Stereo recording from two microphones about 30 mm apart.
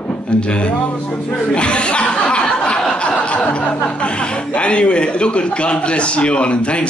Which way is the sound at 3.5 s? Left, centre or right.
Left.